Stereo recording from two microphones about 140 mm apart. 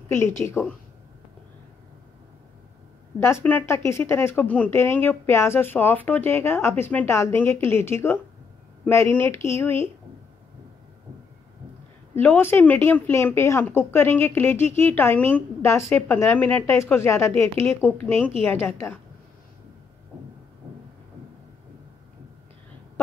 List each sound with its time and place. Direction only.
0.1 s a woman's voice: 20° left (ahead or behind)
3.2 s speech: 20° left (ahead or behind)
12.2 s speech: 15° left (ahead or behind)